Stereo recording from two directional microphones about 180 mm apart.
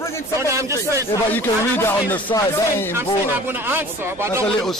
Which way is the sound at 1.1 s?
10° left (ahead or behind).